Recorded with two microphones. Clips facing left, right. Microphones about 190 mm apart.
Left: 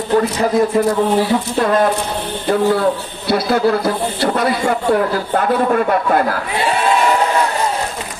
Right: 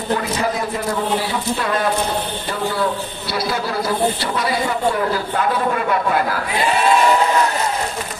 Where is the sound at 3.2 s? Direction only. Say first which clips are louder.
Left 9 dB; 55° left (ahead or behind).